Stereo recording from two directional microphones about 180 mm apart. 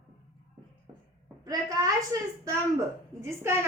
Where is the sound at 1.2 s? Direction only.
20° right (ahead or behind).